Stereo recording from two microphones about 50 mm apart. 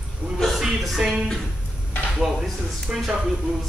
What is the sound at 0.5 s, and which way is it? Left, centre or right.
Music, centre.